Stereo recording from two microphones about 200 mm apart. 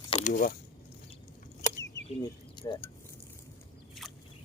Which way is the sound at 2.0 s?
25° left (ahead or behind).